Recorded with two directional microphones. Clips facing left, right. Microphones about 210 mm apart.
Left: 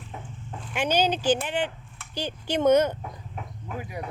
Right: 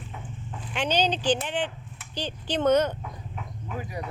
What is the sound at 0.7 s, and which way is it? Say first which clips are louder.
Speech: left 1 dB; 10° left (ahead or behind).